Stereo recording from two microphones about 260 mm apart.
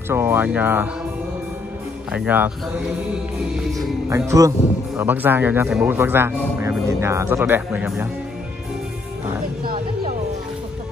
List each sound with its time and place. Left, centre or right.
0.1 s speech: centre
2.1 s speech: centre
4.1 s speech: centre